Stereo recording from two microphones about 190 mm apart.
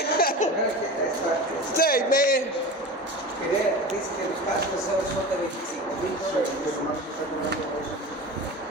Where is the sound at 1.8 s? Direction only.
50° left (ahead or behind).